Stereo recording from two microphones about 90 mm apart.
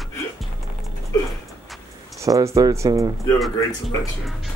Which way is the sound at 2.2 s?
40° right (ahead or behind).